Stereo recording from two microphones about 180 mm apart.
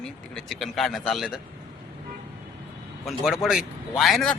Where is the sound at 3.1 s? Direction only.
Centre (ahead or behind).